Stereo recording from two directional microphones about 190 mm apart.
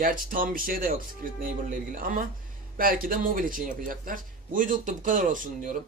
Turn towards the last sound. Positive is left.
turn(degrees=-45)  # may be behind; listen again after turning